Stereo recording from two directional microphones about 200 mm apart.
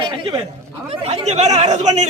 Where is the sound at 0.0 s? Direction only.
25° right (ahead or behind).